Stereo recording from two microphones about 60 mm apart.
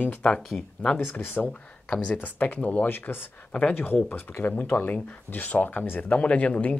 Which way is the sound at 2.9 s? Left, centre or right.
Left.